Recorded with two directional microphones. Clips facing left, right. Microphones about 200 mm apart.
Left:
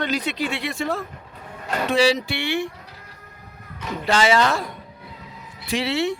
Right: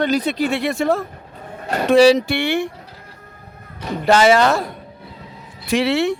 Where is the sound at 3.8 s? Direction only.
45° right (ahead or behind).